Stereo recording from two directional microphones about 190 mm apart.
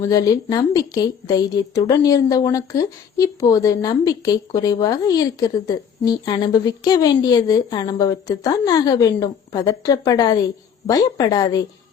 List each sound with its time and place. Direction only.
0.0 s a woman's voice: 20° left (ahead or behind)